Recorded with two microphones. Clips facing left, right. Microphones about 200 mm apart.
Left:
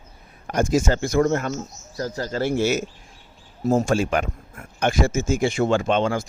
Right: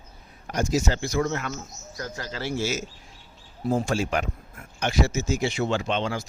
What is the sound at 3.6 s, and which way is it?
Speech, 45° left (ahead or behind).